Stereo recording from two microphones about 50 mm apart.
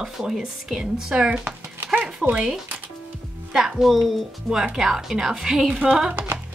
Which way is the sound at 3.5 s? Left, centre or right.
Centre.